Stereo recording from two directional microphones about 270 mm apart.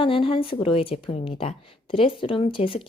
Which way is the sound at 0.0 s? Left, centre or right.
Centre.